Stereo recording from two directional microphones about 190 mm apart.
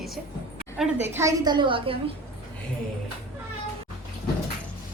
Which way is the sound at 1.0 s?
15° right (ahead or behind).